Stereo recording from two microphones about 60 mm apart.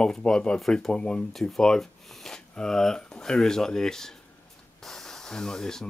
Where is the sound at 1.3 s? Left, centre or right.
Centre.